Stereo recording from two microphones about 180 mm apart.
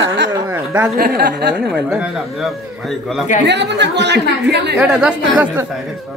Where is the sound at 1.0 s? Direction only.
60° right (ahead or behind).